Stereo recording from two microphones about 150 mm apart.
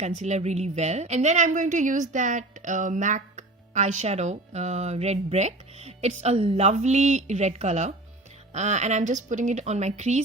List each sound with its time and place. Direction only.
0.0 s a woman's voice: 50° right (ahead or behind)